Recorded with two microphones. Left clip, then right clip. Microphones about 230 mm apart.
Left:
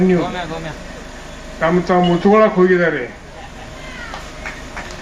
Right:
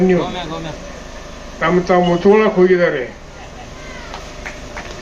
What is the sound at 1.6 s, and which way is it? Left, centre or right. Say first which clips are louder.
A man's voice: right 1 dB; left.